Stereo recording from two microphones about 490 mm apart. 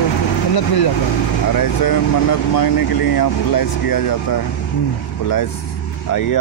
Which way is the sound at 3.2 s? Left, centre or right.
Left.